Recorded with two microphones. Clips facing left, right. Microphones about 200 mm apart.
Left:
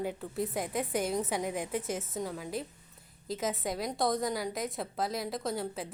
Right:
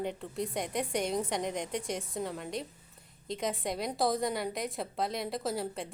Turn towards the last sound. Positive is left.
turn(degrees=0)  # may be behind; listen again after turning